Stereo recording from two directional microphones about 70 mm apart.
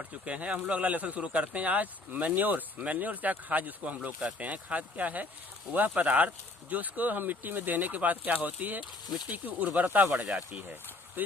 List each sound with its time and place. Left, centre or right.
0.0 s speech: centre